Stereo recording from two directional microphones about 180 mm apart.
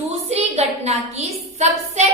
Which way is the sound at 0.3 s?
35° right (ahead or behind).